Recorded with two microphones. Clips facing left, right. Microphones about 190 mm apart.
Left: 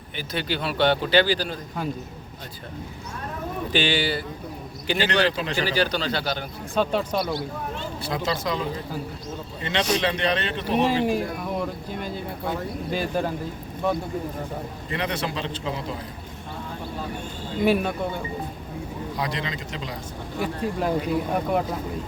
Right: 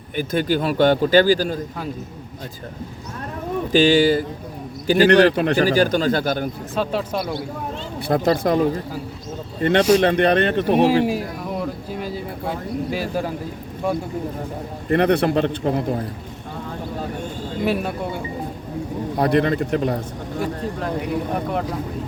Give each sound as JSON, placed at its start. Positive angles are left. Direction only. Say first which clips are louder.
{"t": 0.2, "sound": "a man's voice", "louder": "right 8 dB", "side_deg": -50}
{"t": 3.7, "sound": "a man's voice", "louder": "right 10 dB", "side_deg": -40}
{"t": 5.0, "sound": "a man's voice", "louder": "right 10 dB", "side_deg": -60}
{"t": 6.7, "sound": "speech", "louder": "even", "side_deg": -5}
{"t": 8.0, "sound": "a man's voice", "louder": "right 9 dB", "side_deg": -55}
{"t": 11.0, "sound": "speech", "louder": "right 1 dB", "side_deg": -5}
{"t": 14.8, "sound": "a man's voice", "louder": "right 12 dB", "side_deg": -55}
{"t": 17.7, "sound": "speech", "louder": "left 1 dB", "side_deg": -5}
{"t": 19.1, "sound": "a man's voice", "louder": "right 13 dB", "side_deg": -55}
{"t": 20.4, "sound": "speech", "louder": "even", "side_deg": 10}